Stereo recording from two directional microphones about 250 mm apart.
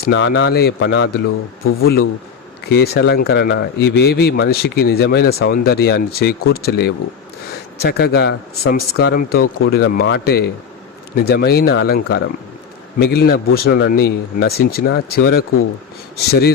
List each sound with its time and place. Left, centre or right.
0.0 s a man's voice: left